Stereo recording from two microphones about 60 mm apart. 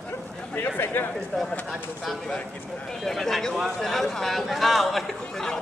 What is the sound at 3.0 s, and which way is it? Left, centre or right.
Speech, centre.